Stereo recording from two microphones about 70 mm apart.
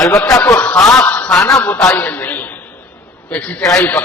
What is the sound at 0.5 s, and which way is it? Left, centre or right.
Speech, centre.